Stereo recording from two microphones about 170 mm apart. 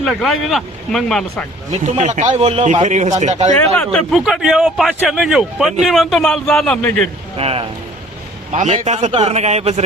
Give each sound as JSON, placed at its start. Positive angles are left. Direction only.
{"t": 0.0, "sound": "speech", "side_deg": 0}
{"t": 1.7, "sound": "a man's voice", "side_deg": -40}
{"t": 3.6, "sound": "speech", "side_deg": 5}
{"t": 7.3, "sound": "a man's voice", "side_deg": -35}